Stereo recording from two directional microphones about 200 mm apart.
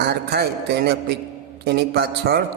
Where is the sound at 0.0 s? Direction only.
55° right (ahead or behind).